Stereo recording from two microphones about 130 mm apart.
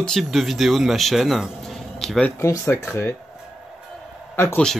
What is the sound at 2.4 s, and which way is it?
Speech, 20° left (ahead or behind).